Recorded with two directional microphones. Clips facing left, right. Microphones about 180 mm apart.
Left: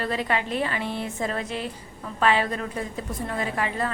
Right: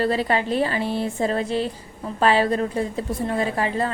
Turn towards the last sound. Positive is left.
turn(degrees=-30)  # may be behind; listen again after turning